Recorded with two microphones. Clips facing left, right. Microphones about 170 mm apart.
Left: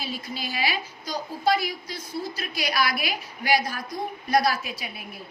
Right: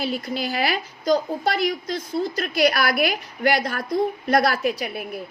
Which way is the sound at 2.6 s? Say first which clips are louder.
Right 6 dB; 60° right (ahead or behind).